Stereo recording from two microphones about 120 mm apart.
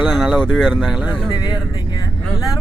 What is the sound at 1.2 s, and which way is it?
Speech, 35° left (ahead or behind).